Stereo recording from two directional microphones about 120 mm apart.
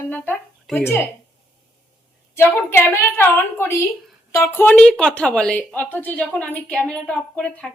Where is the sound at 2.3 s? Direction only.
20° left (ahead or behind).